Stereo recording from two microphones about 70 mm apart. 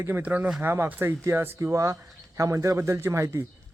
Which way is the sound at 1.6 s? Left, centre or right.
Right.